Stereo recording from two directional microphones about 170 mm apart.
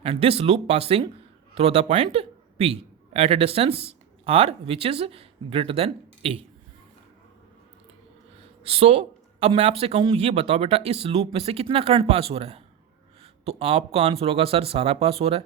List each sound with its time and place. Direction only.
0.0 s a man's voice: 35° right (ahead or behind)
8.6 s speech: 35° right (ahead or behind)